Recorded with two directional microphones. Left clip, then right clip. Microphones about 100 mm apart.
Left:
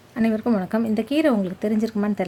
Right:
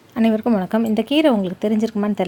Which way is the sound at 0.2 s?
35° right (ahead or behind).